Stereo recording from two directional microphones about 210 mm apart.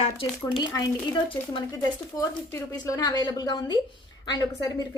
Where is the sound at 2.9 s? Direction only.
20° left (ahead or behind).